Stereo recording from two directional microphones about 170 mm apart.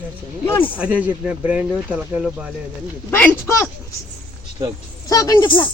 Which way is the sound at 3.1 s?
15° left (ahead or behind).